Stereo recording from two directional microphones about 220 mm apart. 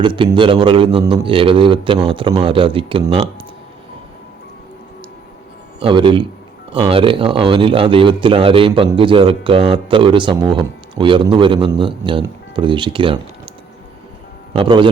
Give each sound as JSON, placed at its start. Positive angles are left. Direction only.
{"t": 0.0, "sound": "a man's voice", "side_deg": -20}
{"t": 5.8, "sound": "a man's voice", "side_deg": -20}
{"t": 14.5, "sound": "a man's voice", "side_deg": -25}